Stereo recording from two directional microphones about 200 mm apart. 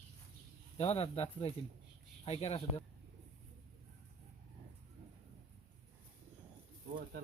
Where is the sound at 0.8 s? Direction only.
30° left (ahead or behind).